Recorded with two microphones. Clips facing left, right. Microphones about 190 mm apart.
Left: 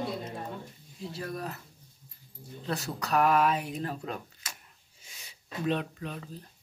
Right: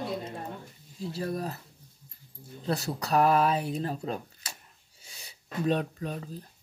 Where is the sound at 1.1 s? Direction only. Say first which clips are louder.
Right 4 dB; 30° right (ahead or behind).